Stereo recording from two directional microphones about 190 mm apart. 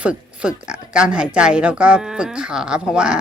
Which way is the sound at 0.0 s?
5° right (ahead or behind).